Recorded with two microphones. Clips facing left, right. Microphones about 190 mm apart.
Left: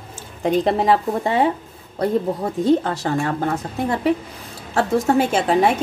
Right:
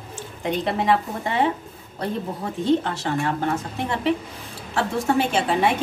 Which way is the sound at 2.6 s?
40° left (ahead or behind).